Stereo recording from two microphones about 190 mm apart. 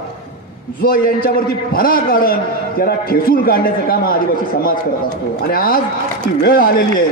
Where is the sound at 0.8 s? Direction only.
50° left (ahead or behind).